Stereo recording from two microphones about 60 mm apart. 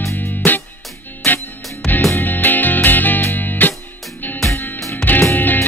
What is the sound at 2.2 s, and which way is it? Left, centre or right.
Music, left.